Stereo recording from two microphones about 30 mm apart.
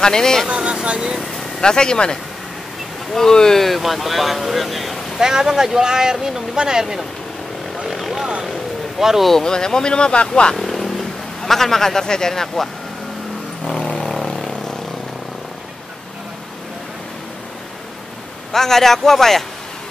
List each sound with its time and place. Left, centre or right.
0.0 s speech: left
0.8 s speech: right
1.6 s speech: left
3.2 s a man's voice: centre
3.6 s speech: centre
5.2 s speech: centre
7.9 s vehicle: centre
9.0 s speech: centre
9.3 s speech: left
10.5 s speech: centre
14.2 s vehicle: centre
18.5 s a man's voice: centre